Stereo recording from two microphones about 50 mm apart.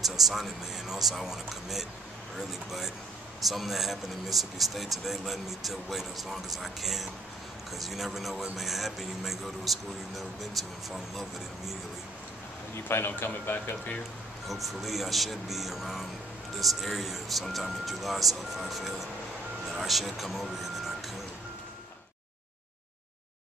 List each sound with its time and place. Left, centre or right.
0.0 s speech: centre
12.7 s a man's voice: left
14.5 s speech: centre